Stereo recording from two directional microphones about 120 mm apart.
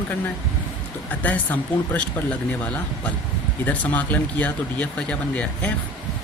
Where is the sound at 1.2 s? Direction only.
15° left (ahead or behind).